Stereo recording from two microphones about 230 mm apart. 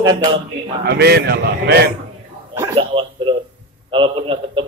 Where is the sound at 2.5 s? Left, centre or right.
Centre.